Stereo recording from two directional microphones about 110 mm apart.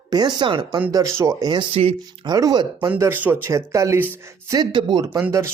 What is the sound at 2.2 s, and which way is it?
Speech, 40° right (ahead or behind).